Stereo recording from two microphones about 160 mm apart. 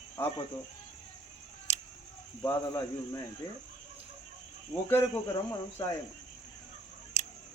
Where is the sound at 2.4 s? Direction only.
20° left (ahead or behind).